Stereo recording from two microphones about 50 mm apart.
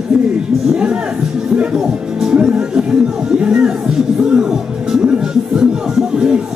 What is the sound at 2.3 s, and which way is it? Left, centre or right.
Music, centre.